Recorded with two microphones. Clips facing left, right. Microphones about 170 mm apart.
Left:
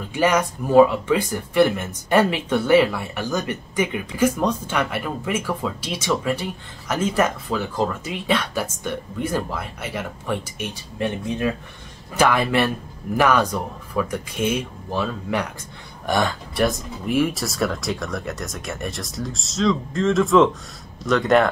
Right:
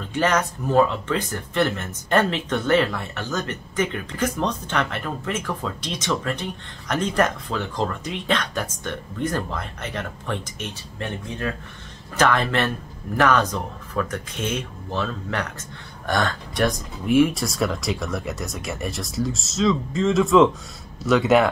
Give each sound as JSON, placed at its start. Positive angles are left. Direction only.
{"t": 0.1, "sound": "speech", "side_deg": 10}